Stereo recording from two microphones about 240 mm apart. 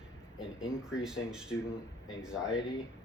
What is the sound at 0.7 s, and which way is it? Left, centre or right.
Speech, centre.